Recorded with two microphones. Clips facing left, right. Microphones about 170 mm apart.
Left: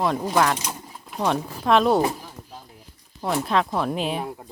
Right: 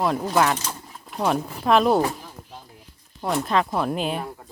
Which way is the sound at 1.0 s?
Centre (ahead or behind).